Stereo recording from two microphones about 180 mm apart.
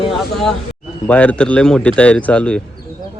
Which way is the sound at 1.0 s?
10° left (ahead or behind).